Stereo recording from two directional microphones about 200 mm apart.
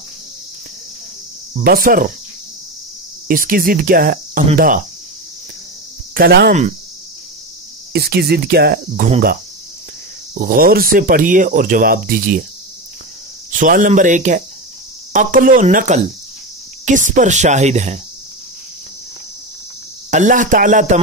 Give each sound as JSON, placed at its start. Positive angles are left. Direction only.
{"t": 1.6, "sound": "speech", "side_deg": -45}
{"t": 3.3, "sound": "speech", "side_deg": -45}
{"t": 6.1, "sound": "speech", "side_deg": -50}
{"t": 7.9, "sound": "speech", "side_deg": -55}
{"t": 10.3, "sound": "speech", "side_deg": -45}
{"t": 13.5, "sound": "speech", "side_deg": -40}
{"t": 20.1, "sound": "speech", "side_deg": -40}